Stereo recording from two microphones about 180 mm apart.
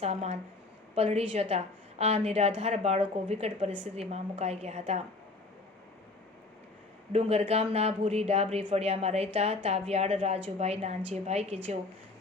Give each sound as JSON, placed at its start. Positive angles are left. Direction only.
{"t": 0.0, "sound": "a woman's voice", "side_deg": -35}
{"t": 7.1, "sound": "a woman's voice", "side_deg": -35}